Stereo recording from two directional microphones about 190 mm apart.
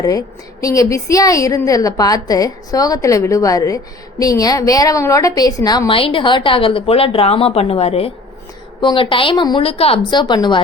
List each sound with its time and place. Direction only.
0.0 s a woman's voice: 20° left (ahead or behind)